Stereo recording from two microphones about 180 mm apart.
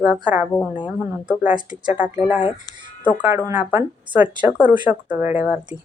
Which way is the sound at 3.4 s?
10° right (ahead or behind).